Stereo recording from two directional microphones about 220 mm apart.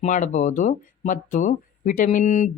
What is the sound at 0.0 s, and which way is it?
Speech, 35° left (ahead or behind).